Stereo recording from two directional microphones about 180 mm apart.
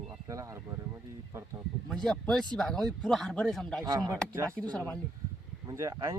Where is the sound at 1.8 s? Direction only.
5° left (ahead or behind).